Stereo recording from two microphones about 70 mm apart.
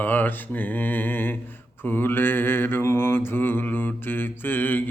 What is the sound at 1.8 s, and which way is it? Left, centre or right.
Mantra, left.